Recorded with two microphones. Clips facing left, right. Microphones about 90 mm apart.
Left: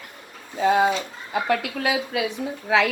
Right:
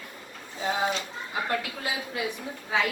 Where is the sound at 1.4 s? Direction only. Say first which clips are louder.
Left 8 dB; 70° left (ahead or behind); by 2.9 s 90° left.